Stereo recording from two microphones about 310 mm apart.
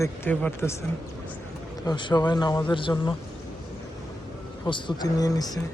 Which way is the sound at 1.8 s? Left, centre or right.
Centre.